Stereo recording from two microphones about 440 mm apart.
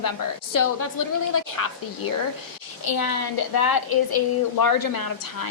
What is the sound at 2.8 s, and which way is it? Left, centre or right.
A woman's voice, left.